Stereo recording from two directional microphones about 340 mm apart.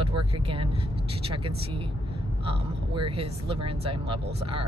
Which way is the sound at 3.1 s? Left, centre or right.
Centre.